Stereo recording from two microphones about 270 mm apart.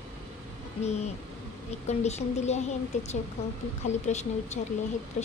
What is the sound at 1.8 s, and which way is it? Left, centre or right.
Speech, left.